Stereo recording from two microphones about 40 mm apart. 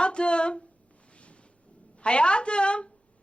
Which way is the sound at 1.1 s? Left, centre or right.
Left.